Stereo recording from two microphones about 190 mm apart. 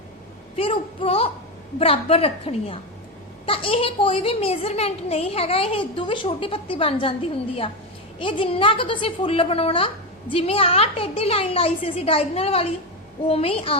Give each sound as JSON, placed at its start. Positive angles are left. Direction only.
{"t": 0.5, "sound": "a woman's voice", "side_deg": 30}